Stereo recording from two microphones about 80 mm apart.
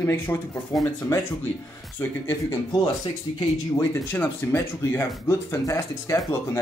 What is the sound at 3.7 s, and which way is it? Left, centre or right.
Speech, left.